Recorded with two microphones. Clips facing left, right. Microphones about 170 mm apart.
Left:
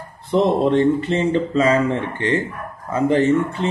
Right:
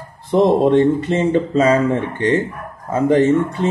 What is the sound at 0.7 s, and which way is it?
Speech, 20° right (ahead or behind).